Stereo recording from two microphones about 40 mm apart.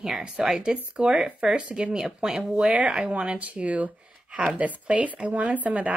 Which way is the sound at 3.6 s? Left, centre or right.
Right.